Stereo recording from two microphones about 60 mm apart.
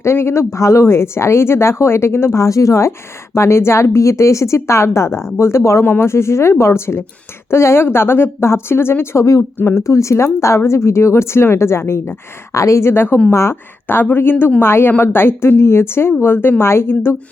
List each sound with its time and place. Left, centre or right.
0.0 s speech: left
3.3 s speech: left
5.8 s a woman's voice: left
6.1 s speech: left
9.7 s speech: left
12.5 s speech: left
12.9 s a woman's voice: left
13.3 s speech: left
13.8 s a woman's voice: left